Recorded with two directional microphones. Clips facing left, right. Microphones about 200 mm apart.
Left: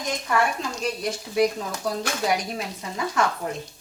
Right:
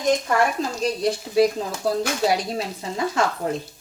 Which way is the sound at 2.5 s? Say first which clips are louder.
Right 4 dB; 30° right (ahead or behind).